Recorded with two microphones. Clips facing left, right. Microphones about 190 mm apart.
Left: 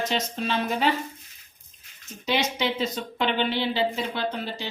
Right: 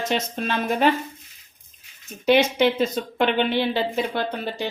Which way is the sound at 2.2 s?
55° right (ahead or behind).